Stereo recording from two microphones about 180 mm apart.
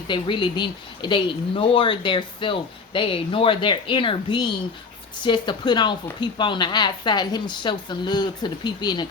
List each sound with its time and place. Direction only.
0.1 s speech: 25° left (ahead or behind)